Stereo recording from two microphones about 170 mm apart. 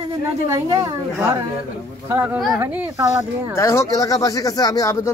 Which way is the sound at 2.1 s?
10° right (ahead or behind).